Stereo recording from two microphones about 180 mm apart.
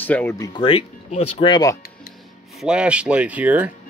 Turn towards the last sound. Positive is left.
turn(degrees=-10)  # may be behind; listen again after turning